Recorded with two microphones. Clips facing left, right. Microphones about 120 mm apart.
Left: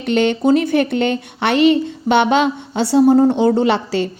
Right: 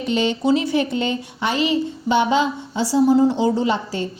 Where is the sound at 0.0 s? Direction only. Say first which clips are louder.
Left 4 dB; 60° left (ahead or behind).